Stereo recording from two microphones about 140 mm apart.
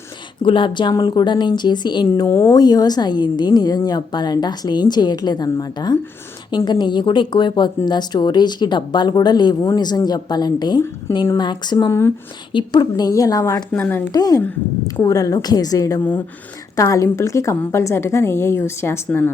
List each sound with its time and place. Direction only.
0.4 s speech: 35° left (ahead or behind)
2.2 s a woman's voice: 20° left (ahead or behind)
2.6 s a woman's voice: 30° left (ahead or behind)
11.9 s a woman's voice: 20° left (ahead or behind)
12.5 s a woman's voice: 35° left (ahead or behind)
13.6 s speech: 10° left (ahead or behind)
14.1 s a woman's voice: 25° left (ahead or behind)